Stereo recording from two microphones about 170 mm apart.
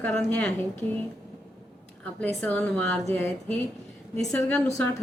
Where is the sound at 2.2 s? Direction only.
10° left (ahead or behind).